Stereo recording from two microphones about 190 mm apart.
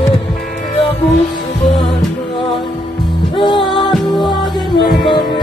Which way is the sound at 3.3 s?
25° left (ahead or behind).